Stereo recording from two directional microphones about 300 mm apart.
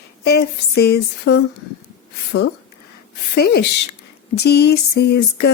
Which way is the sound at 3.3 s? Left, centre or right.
Left.